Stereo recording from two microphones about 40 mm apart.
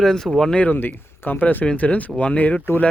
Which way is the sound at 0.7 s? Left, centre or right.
Left.